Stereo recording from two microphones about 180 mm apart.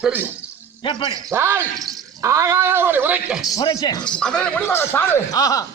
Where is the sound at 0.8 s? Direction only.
25° left (ahead or behind).